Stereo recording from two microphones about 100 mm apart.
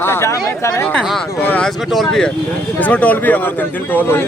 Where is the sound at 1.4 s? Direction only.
20° left (ahead or behind).